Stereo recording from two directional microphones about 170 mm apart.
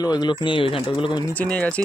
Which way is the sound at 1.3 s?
10° left (ahead or behind).